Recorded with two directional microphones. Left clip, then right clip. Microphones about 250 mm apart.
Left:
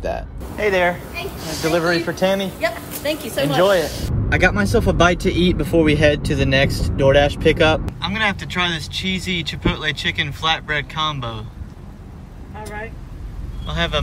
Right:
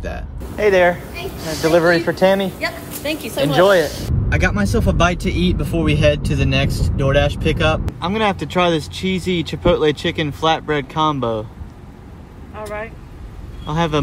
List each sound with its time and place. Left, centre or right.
0.0 s speech: centre
4.3 s speech: centre
8.0 s speech: centre
13.7 s speech: centre